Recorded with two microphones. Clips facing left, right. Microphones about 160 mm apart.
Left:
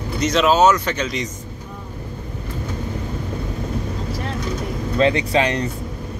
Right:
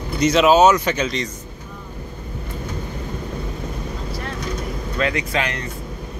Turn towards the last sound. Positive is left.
turn(degrees=30)  # may be behind; listen again after turning